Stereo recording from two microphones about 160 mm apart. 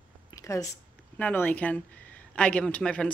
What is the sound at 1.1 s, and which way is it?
Speech, 10° left (ahead or behind).